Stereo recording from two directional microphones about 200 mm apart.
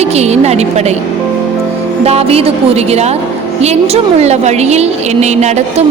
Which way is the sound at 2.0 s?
30° right (ahead or behind).